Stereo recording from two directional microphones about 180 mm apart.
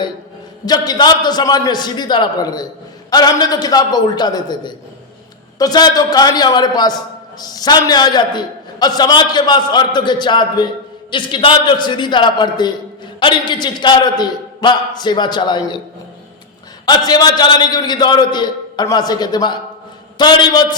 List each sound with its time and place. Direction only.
0.6 s a man's voice: 20° left (ahead or behind)
16.8 s a man's voice: 25° left (ahead or behind)